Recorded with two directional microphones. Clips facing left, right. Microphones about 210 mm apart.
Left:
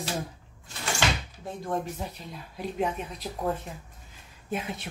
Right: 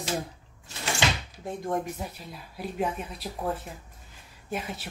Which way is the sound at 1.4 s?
15° right (ahead or behind).